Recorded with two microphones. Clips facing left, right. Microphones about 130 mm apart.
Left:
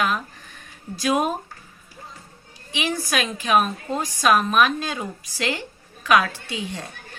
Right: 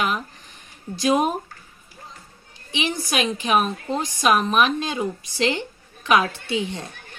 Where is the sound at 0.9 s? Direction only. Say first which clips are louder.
Right 2 dB; 25° right (ahead or behind).